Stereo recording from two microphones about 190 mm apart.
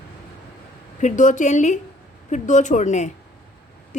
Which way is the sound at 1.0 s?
40° left (ahead or behind).